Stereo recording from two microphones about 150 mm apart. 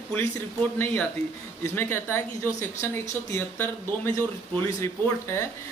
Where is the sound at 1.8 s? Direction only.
15° left (ahead or behind).